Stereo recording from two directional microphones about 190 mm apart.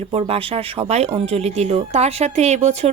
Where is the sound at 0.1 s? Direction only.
30° right (ahead or behind).